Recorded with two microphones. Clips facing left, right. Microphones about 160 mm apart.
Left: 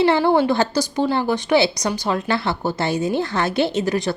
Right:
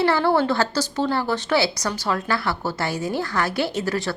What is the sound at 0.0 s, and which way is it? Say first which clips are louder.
A woman's voice: left 3 dB; 20° left (ahead or behind).